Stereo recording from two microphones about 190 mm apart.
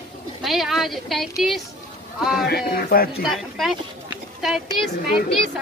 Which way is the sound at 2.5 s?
55° left (ahead or behind).